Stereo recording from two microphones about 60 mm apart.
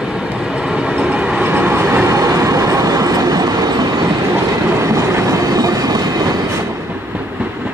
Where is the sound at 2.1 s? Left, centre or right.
Right.